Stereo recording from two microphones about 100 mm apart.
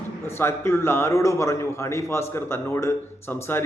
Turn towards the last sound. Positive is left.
turn(degrees=25)  # may be behind; listen again after turning